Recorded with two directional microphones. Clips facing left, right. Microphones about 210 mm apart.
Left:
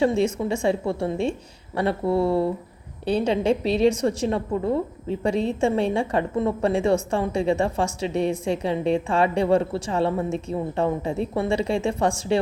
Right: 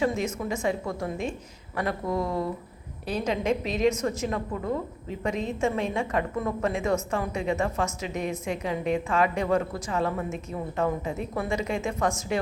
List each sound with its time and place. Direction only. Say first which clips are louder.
0.0 s a woman's voice: left 6 dB; 30° left (ahead or behind)